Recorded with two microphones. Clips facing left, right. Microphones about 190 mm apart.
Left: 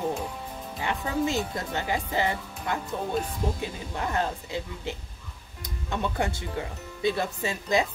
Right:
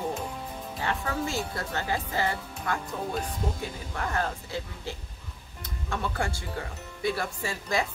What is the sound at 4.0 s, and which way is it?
Speech, 20° left (ahead or behind).